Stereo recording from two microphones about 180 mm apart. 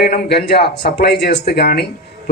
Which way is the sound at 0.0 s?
60° left (ahead or behind).